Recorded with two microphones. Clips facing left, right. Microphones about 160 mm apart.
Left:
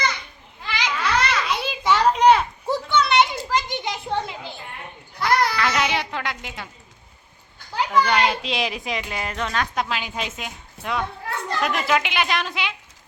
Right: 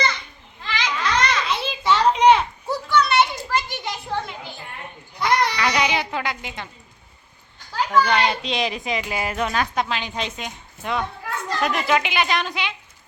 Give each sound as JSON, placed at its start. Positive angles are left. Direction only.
{"t": 0.6, "sound": "children playing", "side_deg": 10}
{"t": 2.9, "sound": "children playing", "side_deg": 20}
{"t": 5.2, "sound": "a sound", "side_deg": 0}
{"t": 8.0, "sound": "a child's voice", "side_deg": 0}